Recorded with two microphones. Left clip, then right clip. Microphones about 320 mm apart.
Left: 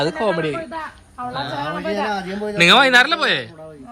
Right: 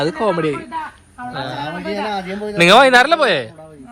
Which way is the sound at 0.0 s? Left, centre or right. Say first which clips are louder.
Right 2 dB; centre.